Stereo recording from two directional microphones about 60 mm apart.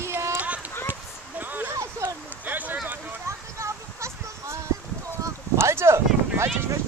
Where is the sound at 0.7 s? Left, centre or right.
Left.